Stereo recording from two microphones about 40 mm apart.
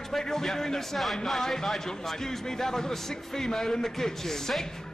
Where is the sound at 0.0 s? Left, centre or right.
Centre.